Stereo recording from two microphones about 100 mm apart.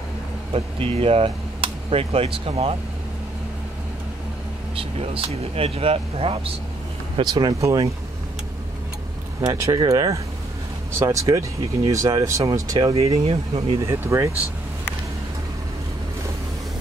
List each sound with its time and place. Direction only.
0.5 s speech: 75° right (ahead or behind)
4.7 s speech: 65° right (ahead or behind)
7.2 s speech: 45° right (ahead or behind)
7.6 s speech: 35° right (ahead or behind)
9.5 s speech: 35° right (ahead or behind)
12.9 s speech: 80° right
13.8 s speech: 30° right (ahead or behind)